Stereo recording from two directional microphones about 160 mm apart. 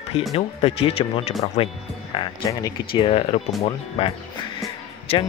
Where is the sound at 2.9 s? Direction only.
35° left (ahead or behind).